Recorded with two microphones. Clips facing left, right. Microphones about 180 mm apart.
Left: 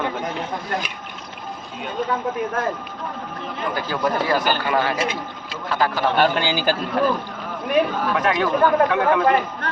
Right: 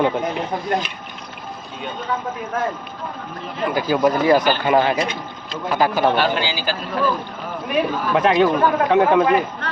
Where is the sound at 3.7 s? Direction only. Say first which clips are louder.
Right 6 dB; 15° right (ahead or behind).